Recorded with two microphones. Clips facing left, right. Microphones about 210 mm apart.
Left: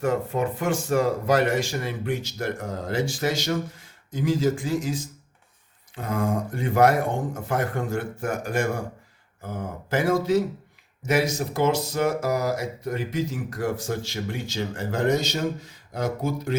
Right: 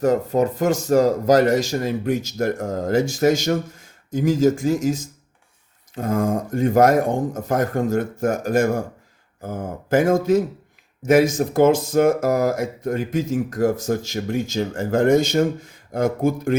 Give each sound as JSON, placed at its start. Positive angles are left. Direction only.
{"t": 0.0, "sound": "speech", "side_deg": -40}